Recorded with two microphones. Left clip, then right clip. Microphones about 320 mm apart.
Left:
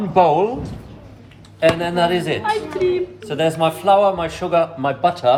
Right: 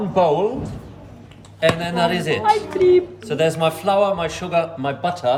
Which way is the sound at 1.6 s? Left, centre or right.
Centre.